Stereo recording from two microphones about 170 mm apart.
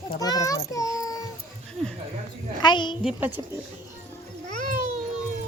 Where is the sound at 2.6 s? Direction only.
25° left (ahead or behind).